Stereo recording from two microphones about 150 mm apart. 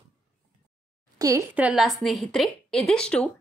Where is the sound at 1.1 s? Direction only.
25° right (ahead or behind).